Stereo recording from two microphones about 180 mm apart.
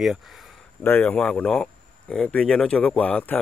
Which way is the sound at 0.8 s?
10° left (ahead or behind).